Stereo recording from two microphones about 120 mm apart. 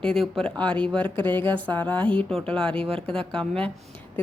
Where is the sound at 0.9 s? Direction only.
45° right (ahead or behind).